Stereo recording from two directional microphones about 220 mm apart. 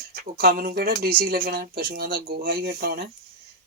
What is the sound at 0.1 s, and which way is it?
Speech, 45° right (ahead or behind).